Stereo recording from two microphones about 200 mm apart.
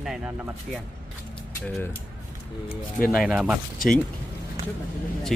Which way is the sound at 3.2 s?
5° right (ahead or behind).